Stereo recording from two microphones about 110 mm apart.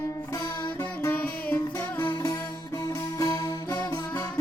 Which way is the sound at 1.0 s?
15° left (ahead or behind).